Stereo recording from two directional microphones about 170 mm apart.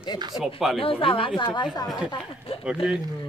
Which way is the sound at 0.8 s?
30° left (ahead or behind).